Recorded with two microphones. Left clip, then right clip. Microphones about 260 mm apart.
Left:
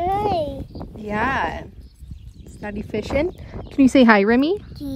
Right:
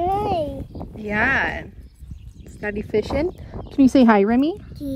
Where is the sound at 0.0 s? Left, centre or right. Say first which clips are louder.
Left 1 dB; left.